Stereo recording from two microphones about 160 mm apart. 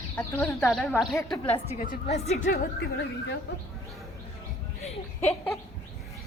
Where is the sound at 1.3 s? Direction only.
35° left (ahead or behind).